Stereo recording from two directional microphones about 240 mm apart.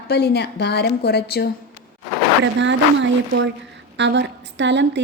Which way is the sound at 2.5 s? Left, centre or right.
Right.